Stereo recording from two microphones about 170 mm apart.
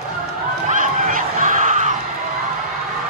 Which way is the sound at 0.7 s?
55° right (ahead or behind).